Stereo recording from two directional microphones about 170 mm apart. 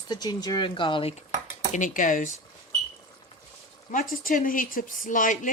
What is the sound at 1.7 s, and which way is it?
Speech, 50° left (ahead or behind).